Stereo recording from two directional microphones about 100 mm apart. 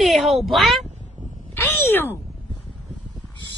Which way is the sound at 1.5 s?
20° left (ahead or behind).